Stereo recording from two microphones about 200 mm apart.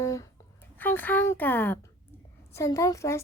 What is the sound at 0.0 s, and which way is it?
Speech, 15° left (ahead or behind).